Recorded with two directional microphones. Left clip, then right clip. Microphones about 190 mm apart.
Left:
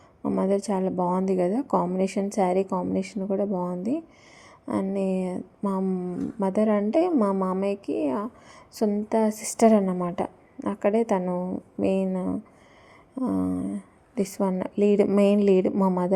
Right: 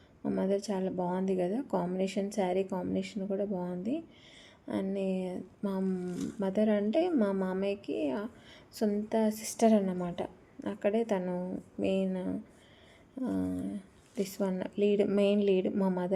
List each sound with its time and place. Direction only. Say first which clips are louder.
0.2 s a woman's voice: left 7 dB; 25° left (ahead or behind)